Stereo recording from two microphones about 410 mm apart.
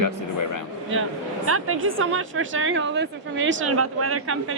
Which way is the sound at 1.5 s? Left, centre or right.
Right.